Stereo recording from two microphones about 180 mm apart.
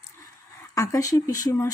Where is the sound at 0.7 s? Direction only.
20° left (ahead or behind).